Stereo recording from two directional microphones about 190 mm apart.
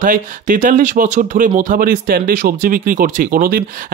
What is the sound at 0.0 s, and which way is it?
Speech, 45° right (ahead or behind).